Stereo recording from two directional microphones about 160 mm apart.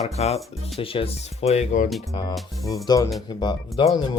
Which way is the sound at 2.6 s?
20° left (ahead or behind).